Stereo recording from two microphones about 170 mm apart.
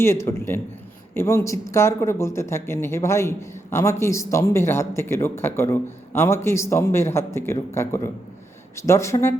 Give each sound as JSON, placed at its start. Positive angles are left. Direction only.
{"t": 0.0, "sound": "speech", "side_deg": 15}